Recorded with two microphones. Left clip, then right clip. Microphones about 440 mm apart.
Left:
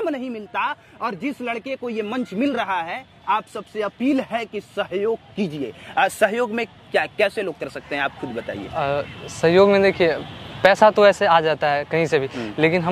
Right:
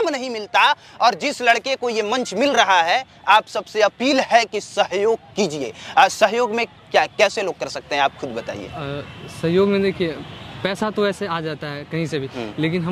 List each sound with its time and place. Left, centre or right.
0.0 s speech: right
8.7 s speech: left